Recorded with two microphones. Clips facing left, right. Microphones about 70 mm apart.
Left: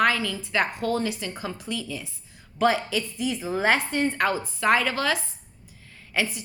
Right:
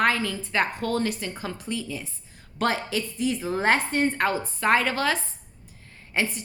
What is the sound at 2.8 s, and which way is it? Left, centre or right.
A woman's voice, right.